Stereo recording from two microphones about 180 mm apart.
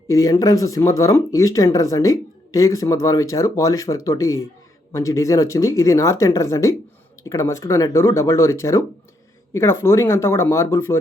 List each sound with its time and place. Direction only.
0.1 s speech: 20° left (ahead or behind)